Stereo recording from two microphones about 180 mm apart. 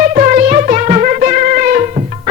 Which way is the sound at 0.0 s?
45° right (ahead or behind).